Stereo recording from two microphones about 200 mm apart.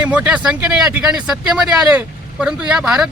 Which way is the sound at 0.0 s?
5° right (ahead or behind).